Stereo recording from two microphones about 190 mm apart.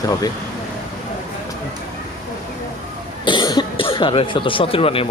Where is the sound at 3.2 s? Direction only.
25° left (ahead or behind).